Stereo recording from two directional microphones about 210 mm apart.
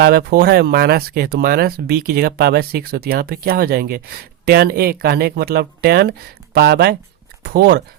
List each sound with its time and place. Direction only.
0.0 s speech: 50° right (ahead or behind)